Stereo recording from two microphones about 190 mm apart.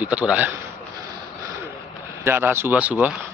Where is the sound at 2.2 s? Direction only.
10° right (ahead or behind).